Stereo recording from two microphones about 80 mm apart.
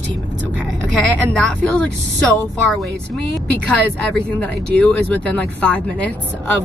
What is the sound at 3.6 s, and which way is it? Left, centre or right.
Speech, centre.